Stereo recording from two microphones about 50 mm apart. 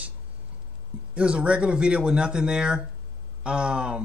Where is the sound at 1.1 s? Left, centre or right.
Right.